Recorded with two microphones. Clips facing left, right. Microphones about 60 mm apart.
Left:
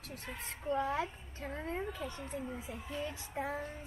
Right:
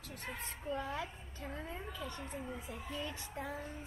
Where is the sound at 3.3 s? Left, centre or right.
Left.